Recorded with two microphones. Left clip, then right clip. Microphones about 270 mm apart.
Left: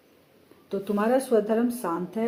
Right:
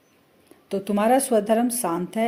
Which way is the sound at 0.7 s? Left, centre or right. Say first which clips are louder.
Right 4 dB; right.